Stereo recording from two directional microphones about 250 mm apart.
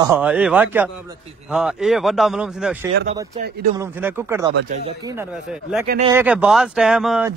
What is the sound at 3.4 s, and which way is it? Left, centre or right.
Speech, right.